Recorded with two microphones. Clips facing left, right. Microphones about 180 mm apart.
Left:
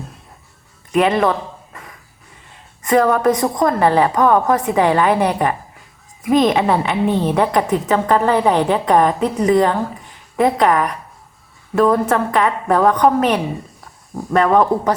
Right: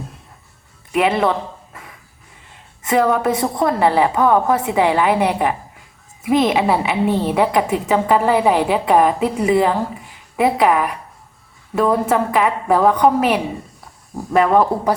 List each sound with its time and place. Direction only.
0.9 s a woman's voice: 5° right (ahead or behind)
2.8 s a woman's voice: 5° right (ahead or behind)